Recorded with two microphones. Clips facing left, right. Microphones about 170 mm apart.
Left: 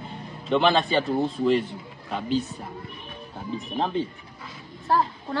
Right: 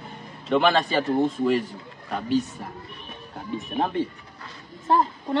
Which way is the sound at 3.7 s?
10° right (ahead or behind).